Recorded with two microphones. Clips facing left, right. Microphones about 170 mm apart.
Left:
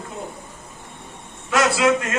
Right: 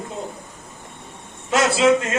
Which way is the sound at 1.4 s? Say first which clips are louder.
Right 2 dB; 25° right (ahead or behind).